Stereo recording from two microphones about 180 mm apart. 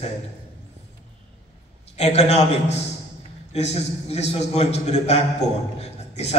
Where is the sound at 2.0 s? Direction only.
35° left (ahead or behind).